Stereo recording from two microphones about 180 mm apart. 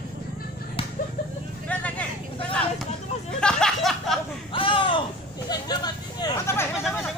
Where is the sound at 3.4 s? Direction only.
5° left (ahead or behind).